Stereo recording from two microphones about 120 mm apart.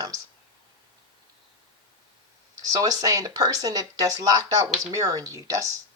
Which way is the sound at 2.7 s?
30° right (ahead or behind).